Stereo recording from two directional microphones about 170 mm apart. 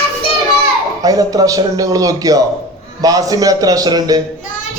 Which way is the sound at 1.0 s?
20° right (ahead or behind).